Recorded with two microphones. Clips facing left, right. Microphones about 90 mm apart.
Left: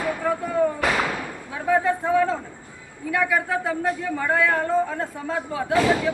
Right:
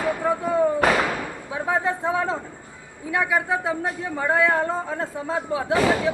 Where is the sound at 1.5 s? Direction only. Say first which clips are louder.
Left 3 dB; 20° right (ahead or behind).